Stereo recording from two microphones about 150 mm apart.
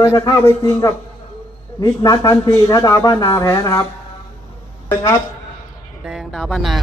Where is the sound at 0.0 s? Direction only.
20° left (ahead or behind).